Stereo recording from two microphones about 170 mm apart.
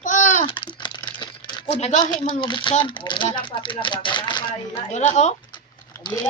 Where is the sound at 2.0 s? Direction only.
25° left (ahead or behind).